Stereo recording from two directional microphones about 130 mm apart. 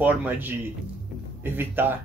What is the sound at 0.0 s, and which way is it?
A man's voice, 10° right (ahead or behind).